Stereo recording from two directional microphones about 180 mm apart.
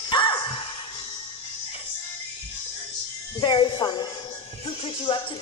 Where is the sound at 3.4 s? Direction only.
25° left (ahead or behind).